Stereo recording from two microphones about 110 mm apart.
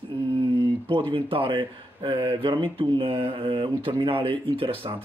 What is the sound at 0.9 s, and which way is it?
Speech, 50° right (ahead or behind).